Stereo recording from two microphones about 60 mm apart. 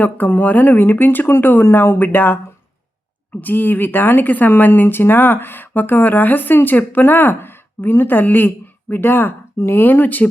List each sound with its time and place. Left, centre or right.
0.0 s speech: left
3.4 s speech: left